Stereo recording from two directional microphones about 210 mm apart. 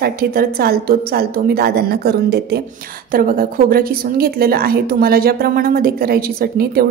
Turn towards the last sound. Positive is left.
turn(degrees=-45)  # may be behind; listen again after turning